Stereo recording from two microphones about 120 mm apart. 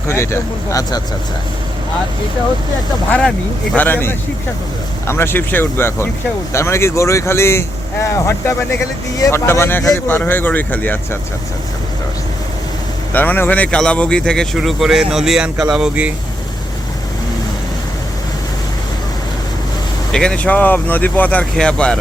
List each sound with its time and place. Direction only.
0.1 s speech: 20° left (ahead or behind)
3.1 s speech: 10° left (ahead or behind)
9.1 s speech: 25° left (ahead or behind)
13.1 s speech: 15° left (ahead or behind); by 16.1 s 10° right (ahead or behind)
20.1 s speech: 10° left (ahead or behind)